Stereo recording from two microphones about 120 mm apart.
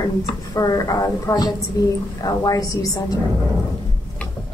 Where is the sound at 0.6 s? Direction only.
30° left (ahead or behind).